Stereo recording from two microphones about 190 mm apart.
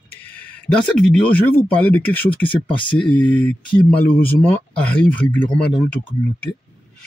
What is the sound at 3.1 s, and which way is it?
Speech, 5° left (ahead or behind).